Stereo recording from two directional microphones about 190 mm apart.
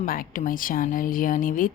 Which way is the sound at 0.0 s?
45° left (ahead or behind).